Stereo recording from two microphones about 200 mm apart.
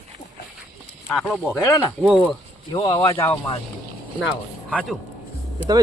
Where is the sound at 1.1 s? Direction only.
Centre (ahead or behind).